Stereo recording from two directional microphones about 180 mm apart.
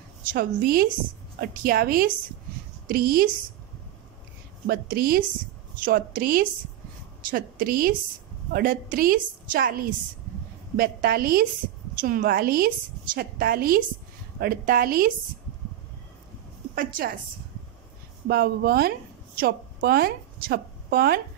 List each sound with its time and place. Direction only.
0.3 s a woman's voice: 55° right (ahead or behind)
4.6 s a woman's voice: 55° right (ahead or behind)
16.7 s a woman's voice: 50° right (ahead or behind)
18.3 s a woman's voice: 60° right (ahead or behind)